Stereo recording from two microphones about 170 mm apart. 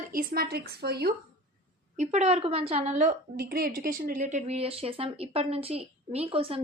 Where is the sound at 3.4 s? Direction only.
60° right (ahead or behind).